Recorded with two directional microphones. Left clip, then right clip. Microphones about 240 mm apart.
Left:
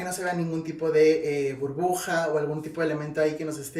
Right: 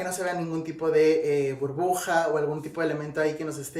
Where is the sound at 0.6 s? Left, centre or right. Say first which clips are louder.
Left 1 dB; centre.